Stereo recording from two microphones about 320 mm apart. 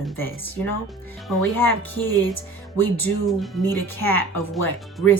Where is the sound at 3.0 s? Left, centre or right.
Centre.